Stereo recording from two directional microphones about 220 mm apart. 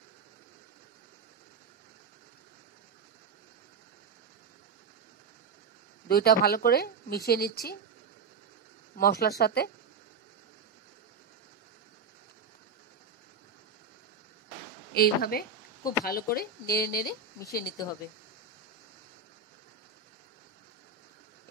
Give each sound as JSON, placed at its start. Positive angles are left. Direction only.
{"t": 6.0, "sound": "speech", "side_deg": 45}
{"t": 8.9, "sound": "speech", "side_deg": 45}
{"t": 15.0, "sound": "speech", "side_deg": 45}
{"t": 17.4, "sound": "speech", "side_deg": 15}